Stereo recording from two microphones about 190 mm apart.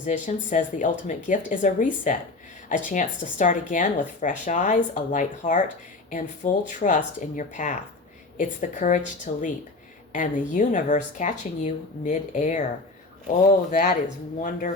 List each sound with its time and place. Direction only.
0.0 s a woman's voice: 40° left (ahead or behind)